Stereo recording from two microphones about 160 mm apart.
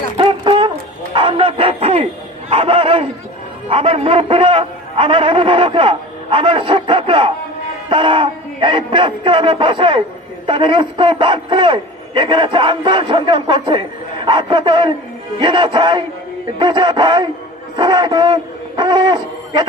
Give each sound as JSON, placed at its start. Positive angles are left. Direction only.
{"t": 0.2, "sound": "a sound", "side_deg": -35}
{"t": 1.1, "sound": "bow-wow", "side_deg": -30}
{"t": 2.5, "sound": "a man's voice", "side_deg": -35}